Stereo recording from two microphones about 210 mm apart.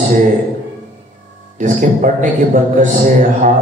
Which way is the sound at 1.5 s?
40° right (ahead or behind).